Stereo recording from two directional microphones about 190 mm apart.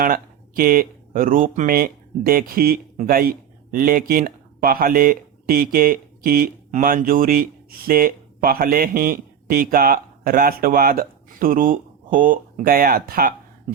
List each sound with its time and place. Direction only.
0.0 s speech: 50° right (ahead or behind)